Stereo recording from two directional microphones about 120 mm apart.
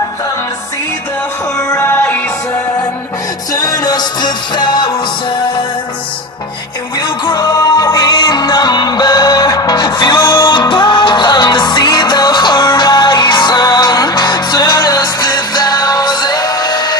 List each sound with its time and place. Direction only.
1.5 s music: 20° left (ahead or behind)
3.5 s music: 30° left (ahead or behind)
7.0 s music: 35° left (ahead or behind)